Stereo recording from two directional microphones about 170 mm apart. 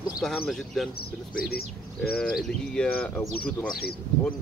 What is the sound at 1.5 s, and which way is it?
Speech, 65° left (ahead or behind).